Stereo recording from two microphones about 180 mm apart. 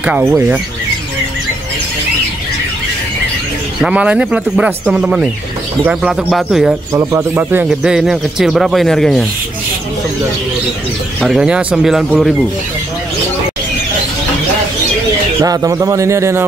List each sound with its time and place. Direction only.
0.0 s speech: 5° right (ahead or behind)
3.8 s speech: 5° right (ahead or behind)
6.9 s speech: 20° right (ahead or behind); by 9.2 s centre (ahead or behind)
11.1 s speech: centre (ahead or behind)
15.4 s speech: 20° right (ahead or behind)